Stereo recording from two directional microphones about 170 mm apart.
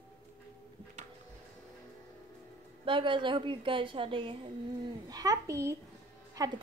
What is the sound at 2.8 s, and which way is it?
A woman's voice, 30° right (ahead or behind).